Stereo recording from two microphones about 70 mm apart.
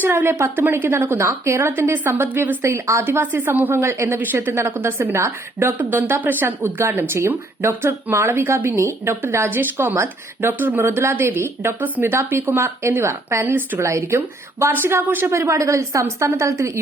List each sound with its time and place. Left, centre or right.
0.0 s speech: right
2.6 s speech: right
13.4 s speech: right
13.7 s a woman's voice: right